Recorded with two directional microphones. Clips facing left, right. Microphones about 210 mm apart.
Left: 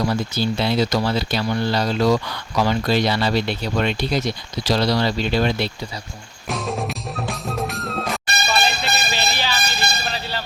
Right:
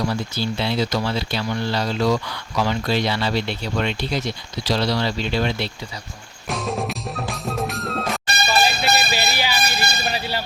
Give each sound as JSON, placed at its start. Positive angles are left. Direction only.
{"t": 0.3, "sound": "speech", "side_deg": 40}
{"t": 6.5, "sound": "music", "side_deg": 0}